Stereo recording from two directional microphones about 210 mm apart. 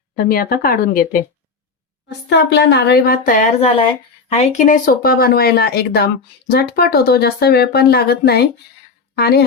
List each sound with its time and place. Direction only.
0.2 s speech: 45° left (ahead or behind)
2.0 s a woman's voice: 55° left (ahead or behind)